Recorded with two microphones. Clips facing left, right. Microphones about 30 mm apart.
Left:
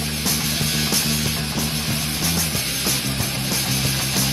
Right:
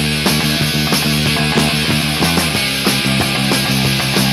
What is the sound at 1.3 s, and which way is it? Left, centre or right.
Music, right.